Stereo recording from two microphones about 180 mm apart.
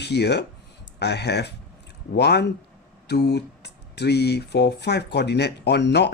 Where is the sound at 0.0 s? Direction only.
70° left (ahead or behind).